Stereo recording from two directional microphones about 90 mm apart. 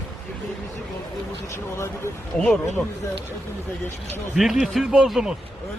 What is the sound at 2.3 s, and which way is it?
Speech, 10° left (ahead or behind).